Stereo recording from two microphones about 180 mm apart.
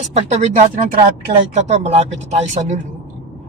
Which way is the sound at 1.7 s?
35° right (ahead or behind).